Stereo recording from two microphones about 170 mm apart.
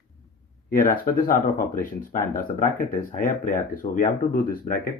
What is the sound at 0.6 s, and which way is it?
Speech, 55° left (ahead or behind).